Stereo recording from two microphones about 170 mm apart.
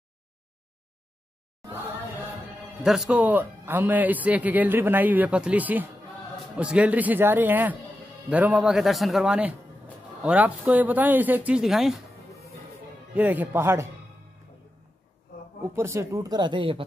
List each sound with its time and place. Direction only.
2.8 s a man's voice: 5° right (ahead or behind)
13.1 s a man's voice: 10° right (ahead or behind)
15.6 s speech: 15° right (ahead or behind)